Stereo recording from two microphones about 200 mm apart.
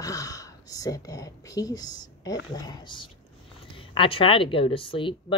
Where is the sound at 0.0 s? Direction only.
15° left (ahead or behind).